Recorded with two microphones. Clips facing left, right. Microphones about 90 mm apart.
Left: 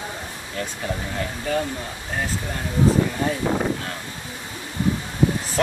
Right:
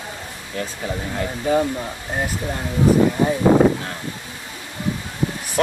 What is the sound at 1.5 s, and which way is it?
Speech, 15° right (ahead or behind).